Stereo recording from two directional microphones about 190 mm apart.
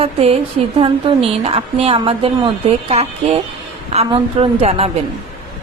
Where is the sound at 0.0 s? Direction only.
30° right (ahead or behind).